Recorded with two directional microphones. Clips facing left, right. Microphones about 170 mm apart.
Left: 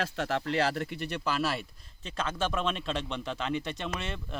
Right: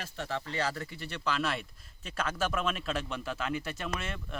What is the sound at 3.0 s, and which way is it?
Speech, 25° left (ahead or behind).